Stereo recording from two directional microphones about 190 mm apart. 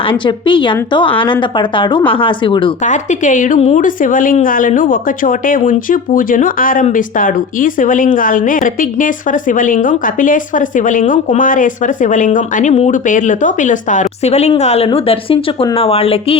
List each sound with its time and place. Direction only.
0.0 s a woman's voice: 25° left (ahead or behind)
2.8 s a woman's voice: 40° left (ahead or behind)